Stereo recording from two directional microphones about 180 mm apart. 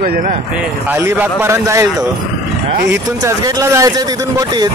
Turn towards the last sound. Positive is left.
turn(degrees=-15)  # may be behind; listen again after turning